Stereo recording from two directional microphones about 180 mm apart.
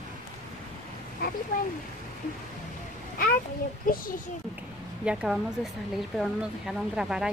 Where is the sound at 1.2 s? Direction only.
55° left (ahead or behind).